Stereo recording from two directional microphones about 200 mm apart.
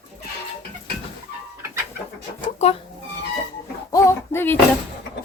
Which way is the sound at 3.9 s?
15° left (ahead or behind).